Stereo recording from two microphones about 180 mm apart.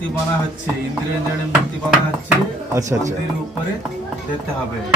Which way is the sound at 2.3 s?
15° right (ahead or behind).